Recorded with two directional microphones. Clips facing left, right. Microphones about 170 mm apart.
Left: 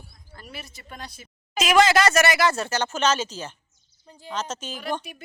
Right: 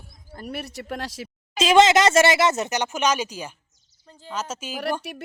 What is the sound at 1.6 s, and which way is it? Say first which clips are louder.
Speech: right 3 dB; 25° right (ahead or behind).